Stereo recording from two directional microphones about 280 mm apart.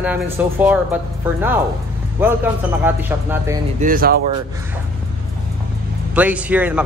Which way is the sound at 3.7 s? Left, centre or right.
Right.